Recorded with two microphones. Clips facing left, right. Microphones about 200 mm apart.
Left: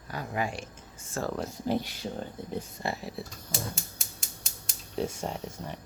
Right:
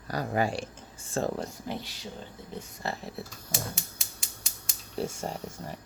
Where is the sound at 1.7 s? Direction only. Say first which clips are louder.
Left 10 dB; 35° left (ahead or behind).